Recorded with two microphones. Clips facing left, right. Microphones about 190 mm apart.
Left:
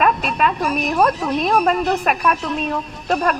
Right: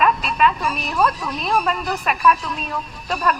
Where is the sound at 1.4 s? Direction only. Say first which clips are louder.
Left 4 dB; 40° left (ahead or behind).